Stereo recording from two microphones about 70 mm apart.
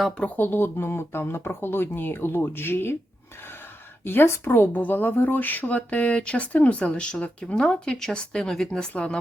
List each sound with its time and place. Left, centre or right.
0.2 s speech: left
4.0 s speech: left; by 9.1 s centre